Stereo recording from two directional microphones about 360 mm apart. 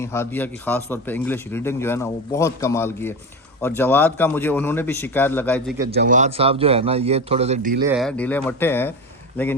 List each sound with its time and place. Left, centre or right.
0.0 s a man's voice: centre
5.9 s a man's voice: right
7.9 s speech: centre